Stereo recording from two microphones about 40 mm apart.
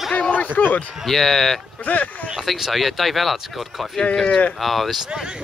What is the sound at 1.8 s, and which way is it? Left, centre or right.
Speech, left.